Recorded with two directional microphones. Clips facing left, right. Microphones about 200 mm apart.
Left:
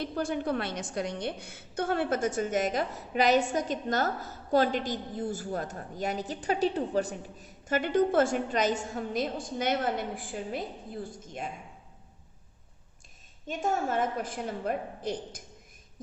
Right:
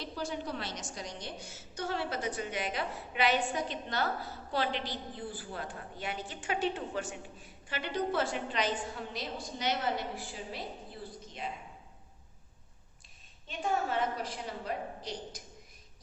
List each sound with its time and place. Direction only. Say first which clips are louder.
0.0 s a woman's voice: left 7 dB; 55° left (ahead or behind)
13.5 s a woman's voice: left 3 dB; 45° left (ahead or behind)